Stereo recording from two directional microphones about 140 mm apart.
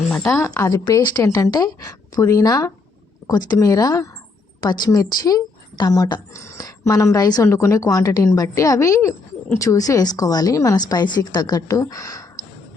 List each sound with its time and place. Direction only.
0.1 s speech: 10° left (ahead or behind)